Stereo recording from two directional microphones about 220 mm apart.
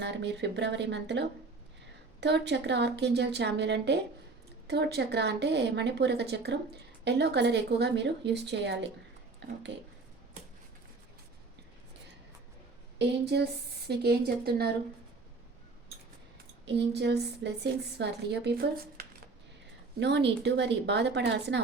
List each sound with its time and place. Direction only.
0.0 s a woman's voice: 50° right (ahead or behind)
13.0 s a woman's voice: 50° right (ahead or behind)
16.6 s a woman's voice: 50° right (ahead or behind)
20.0 s a woman's voice: 50° right (ahead or behind)